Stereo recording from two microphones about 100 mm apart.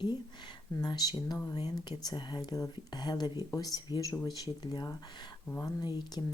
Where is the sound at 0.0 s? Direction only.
45° left (ahead or behind).